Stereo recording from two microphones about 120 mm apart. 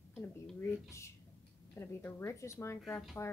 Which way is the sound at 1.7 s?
20° left (ahead or behind).